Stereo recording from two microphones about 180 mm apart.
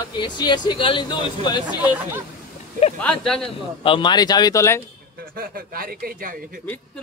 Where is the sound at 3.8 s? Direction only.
25° left (ahead or behind).